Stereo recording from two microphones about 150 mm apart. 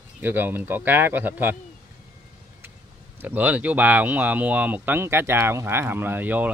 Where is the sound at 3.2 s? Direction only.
10° right (ahead or behind).